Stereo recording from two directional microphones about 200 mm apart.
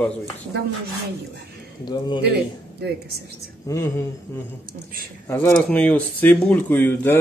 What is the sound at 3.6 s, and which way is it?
Speech, 15° left (ahead or behind).